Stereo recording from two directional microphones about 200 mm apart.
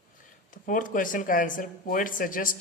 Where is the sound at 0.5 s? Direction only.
40° left (ahead or behind).